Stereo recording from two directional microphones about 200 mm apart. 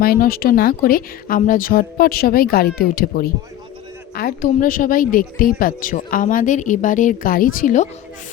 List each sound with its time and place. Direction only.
0.0 s speech: 50° left (ahead or behind)